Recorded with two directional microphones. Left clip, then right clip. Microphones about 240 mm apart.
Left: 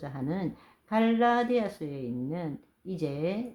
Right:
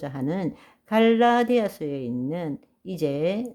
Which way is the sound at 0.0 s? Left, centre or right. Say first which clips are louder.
Right 6 dB; right.